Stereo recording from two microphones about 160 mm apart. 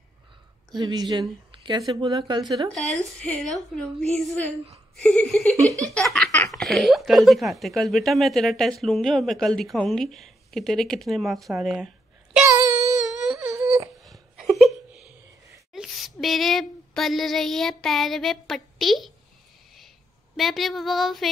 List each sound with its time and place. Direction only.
0.7 s speech: 25° right (ahead or behind)
2.7 s speech: centre (ahead or behind)
12.4 s child singing: 20° right (ahead or behind)
13.0 s a sound: centre (ahead or behind)
13.5 s wail: 20° right (ahead or behind)
14.0 s a sound: centre (ahead or behind)
20.3 s speech: centre (ahead or behind)